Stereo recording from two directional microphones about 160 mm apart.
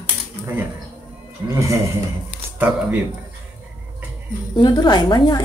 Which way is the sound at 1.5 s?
20° right (ahead or behind).